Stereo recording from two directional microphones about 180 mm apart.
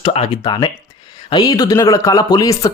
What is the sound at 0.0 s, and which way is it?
Speech, 35° left (ahead or behind).